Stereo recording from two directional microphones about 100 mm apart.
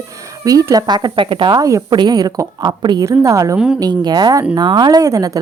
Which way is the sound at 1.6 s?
35° right (ahead or behind).